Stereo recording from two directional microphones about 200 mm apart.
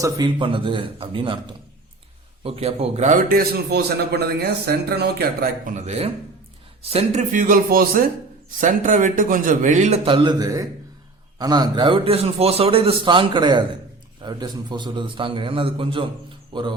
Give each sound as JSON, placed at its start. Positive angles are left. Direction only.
{"t": 0.0, "sound": "a man's voice", "side_deg": -20}